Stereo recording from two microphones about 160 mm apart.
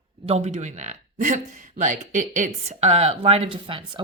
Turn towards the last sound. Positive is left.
turn(degrees=-35)  # may be behind; listen again after turning